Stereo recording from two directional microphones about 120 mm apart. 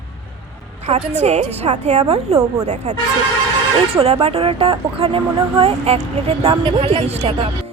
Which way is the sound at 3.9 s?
55° right (ahead or behind).